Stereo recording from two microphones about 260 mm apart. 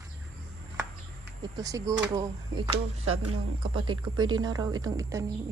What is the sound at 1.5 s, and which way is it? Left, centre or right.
A woman's voice, centre.